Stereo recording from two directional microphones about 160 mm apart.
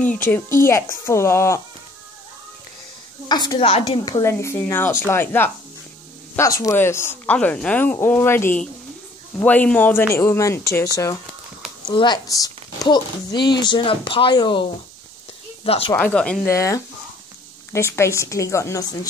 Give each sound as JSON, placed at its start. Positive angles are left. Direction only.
{"t": 0.0, "sound": "speech", "side_deg": 10}
{"t": 3.3, "sound": "speech", "side_deg": 25}
{"t": 11.9, "sound": "speech", "side_deg": 30}
{"t": 15.9, "sound": "speech", "side_deg": 10}
{"t": 16.4, "sound": "speech", "side_deg": 20}